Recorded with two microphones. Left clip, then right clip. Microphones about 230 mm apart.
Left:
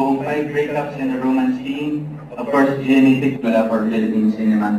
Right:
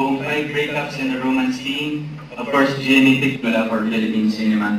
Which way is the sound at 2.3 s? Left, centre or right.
Centre.